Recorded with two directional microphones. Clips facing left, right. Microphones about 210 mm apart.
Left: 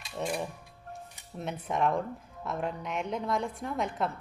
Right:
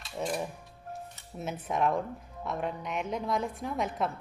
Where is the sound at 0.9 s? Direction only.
Centre (ahead or behind).